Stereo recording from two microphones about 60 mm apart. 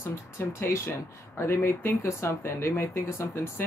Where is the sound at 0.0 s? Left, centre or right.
Left.